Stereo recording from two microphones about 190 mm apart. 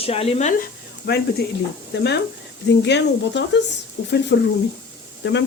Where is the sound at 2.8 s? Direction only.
70° left (ahead or behind).